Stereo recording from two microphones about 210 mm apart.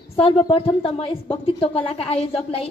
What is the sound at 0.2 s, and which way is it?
Speech, 25° left (ahead or behind).